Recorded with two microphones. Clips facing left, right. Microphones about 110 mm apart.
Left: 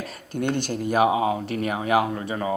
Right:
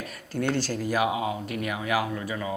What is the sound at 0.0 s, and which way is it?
A man's voice, 25° left (ahead or behind).